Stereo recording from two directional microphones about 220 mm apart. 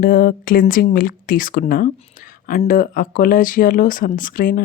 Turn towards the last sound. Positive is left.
turn(degrees=40)  # may be behind; listen again after turning